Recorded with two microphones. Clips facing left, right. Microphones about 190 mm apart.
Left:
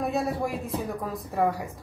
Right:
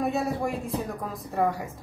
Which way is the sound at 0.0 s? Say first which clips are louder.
Even; centre (ahead or behind).